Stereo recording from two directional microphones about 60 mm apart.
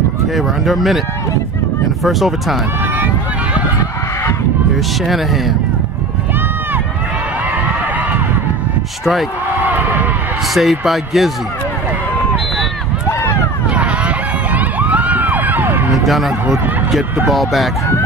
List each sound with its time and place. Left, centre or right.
0.4 s speech: centre
2.0 s speech: centre
9.6 s a sound: right
10.5 s speech: centre
13.7 s a sound: right
17.3 s speech: centre